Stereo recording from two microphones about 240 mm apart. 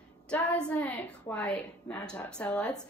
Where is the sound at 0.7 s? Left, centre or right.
Centre.